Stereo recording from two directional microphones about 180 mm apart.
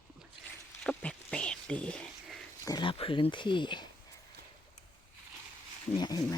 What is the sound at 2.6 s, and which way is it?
Speech, 25° left (ahead or behind).